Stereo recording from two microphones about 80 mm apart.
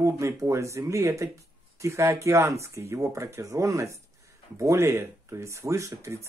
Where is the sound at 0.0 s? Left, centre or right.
Right.